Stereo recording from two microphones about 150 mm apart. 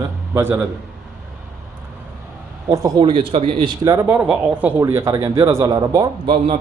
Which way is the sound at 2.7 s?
25° right (ahead or behind).